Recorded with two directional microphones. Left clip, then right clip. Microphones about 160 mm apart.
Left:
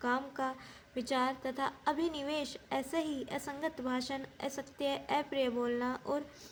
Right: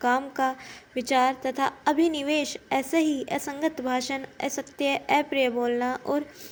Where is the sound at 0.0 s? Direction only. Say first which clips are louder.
Right 10 dB; 25° right (ahead or behind).